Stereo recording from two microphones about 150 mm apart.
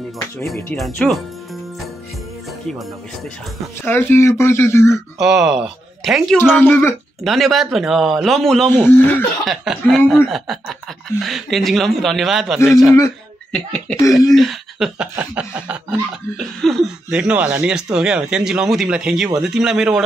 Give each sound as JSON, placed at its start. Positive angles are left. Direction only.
{"t": 0.7, "sound": "speech", "side_deg": 0}
{"t": 3.8, "sound": "speech", "side_deg": 15}
{"t": 5.2, "sound": "speech", "side_deg": -5}
{"t": 6.5, "sound": "speech", "side_deg": 15}
{"t": 7.2, "sound": "speech", "side_deg": 0}
{"t": 8.7, "sound": "speech", "side_deg": 15}
{"t": 9.5, "sound": "speech", "side_deg": 0}